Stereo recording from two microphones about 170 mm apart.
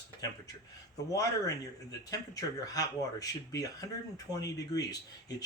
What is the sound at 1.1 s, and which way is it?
A man's voice, 20° left (ahead or behind).